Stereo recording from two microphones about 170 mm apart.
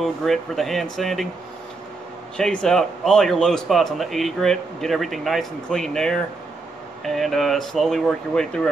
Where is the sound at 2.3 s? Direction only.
5° left (ahead or behind).